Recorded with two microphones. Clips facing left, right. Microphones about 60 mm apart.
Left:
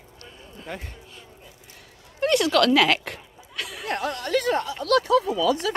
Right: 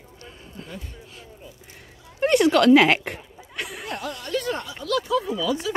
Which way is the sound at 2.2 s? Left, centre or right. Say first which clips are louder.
Right 3 dB; centre.